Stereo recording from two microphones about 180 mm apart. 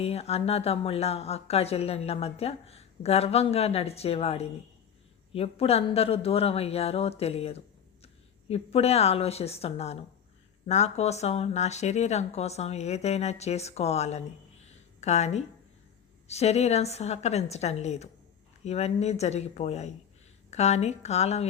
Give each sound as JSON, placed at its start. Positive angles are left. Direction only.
{"t": 0.0, "sound": "a woman's voice", "side_deg": 35}